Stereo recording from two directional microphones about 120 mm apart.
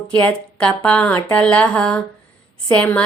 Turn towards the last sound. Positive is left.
turn(degrees=10)  # may be behind; listen again after turning